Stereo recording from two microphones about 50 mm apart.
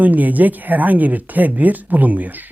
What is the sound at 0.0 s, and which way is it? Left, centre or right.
Speech, right.